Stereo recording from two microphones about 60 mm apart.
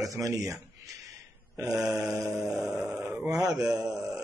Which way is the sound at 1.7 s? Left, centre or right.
Centre.